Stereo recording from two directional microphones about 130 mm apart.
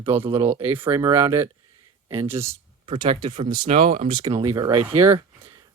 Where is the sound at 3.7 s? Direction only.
55° right (ahead or behind).